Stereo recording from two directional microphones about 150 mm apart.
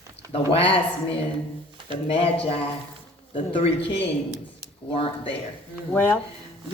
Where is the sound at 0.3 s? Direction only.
40° left (ahead or behind).